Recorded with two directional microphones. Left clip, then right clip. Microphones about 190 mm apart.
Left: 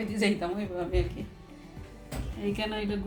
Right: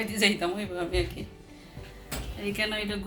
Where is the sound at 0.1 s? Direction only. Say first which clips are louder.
Right 3 dB; 5° right (ahead or behind).